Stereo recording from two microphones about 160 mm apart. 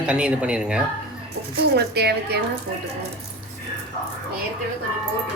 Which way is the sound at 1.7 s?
90° right.